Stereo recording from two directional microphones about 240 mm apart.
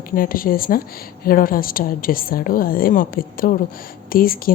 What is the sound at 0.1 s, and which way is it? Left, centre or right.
A woman's voice, left.